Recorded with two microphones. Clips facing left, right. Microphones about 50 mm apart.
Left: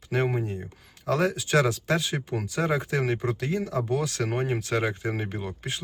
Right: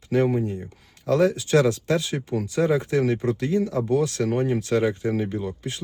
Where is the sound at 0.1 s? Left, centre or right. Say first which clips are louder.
Right 5 dB; left.